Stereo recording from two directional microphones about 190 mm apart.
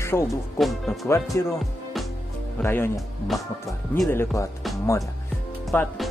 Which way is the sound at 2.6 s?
10° left (ahead or behind).